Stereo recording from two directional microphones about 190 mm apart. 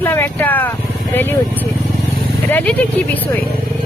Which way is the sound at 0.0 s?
10° left (ahead or behind).